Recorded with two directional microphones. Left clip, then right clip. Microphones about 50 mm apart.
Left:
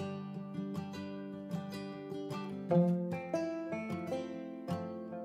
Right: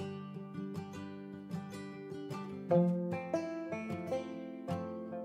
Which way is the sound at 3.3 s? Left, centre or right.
Centre.